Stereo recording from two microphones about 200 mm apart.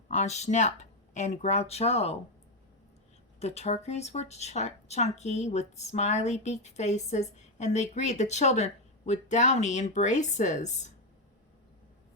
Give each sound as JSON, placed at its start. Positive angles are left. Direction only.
{"t": 0.1, "sound": "speech", "side_deg": 35}
{"t": 3.4, "sound": "speech", "side_deg": 30}